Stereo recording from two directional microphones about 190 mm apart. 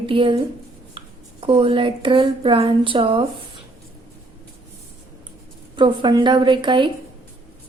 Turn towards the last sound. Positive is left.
turn(degrees=-25)  # may be behind; listen again after turning